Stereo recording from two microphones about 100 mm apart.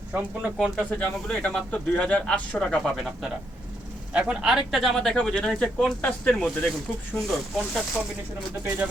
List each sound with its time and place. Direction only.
0.1 s speech: 15° right (ahead or behind)
0.6 s speech: 10° left (ahead or behind)
4.1 s speech: 10° right (ahead or behind)